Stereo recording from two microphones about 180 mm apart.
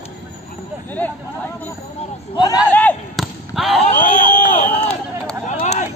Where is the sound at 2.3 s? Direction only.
20° left (ahead or behind).